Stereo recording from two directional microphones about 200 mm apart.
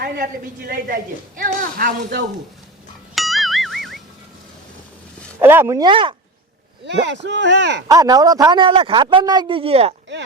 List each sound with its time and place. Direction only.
0.0 s speech: 50° right (ahead or behind)
3.2 s music: centre (ahead or behind)
5.4 s speech: 10° right (ahead or behind)
6.8 s speech: 60° right (ahead or behind)
7.9 s a man's voice: 20° right (ahead or behind)